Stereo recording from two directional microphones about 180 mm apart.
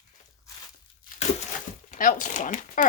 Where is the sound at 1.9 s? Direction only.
45° left (ahead or behind).